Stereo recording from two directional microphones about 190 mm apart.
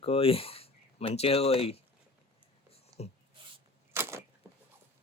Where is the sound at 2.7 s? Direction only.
35° left (ahead or behind).